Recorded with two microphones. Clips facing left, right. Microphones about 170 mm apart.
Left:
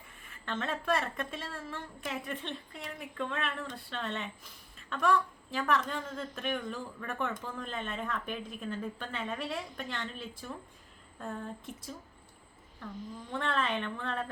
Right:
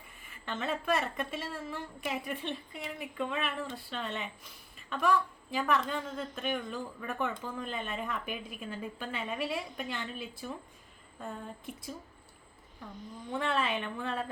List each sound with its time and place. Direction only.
0.2 s a woman's voice: 5° right (ahead or behind)
13.3 s a woman's voice: 5° right (ahead or behind)